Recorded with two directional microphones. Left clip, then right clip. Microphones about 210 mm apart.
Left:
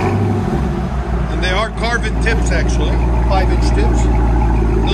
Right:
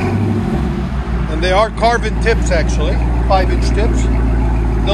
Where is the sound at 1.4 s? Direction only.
5° left (ahead or behind).